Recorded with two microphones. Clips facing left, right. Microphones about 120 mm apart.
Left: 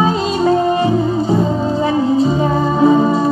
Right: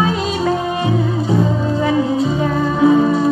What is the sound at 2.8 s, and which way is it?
Music, 35° left (ahead or behind).